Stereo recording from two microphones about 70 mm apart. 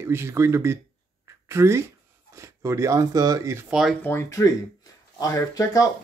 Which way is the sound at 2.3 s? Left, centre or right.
Right.